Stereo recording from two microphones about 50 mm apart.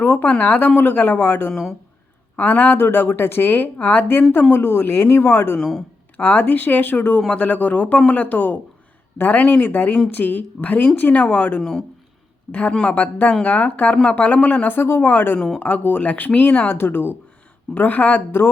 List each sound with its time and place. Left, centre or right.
0.0 s speech: left
0.3 s speech: left
6.1 s speech: left
16.7 s speech: left
17.7 s speech: left
18.3 s speech: left